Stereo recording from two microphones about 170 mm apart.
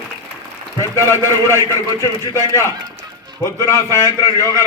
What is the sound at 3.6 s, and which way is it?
A man's voice, 15° left (ahead or behind).